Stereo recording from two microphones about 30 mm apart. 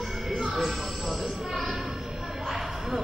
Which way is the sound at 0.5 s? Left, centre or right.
Centre.